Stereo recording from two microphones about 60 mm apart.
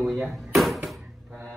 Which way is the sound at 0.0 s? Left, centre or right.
Centre.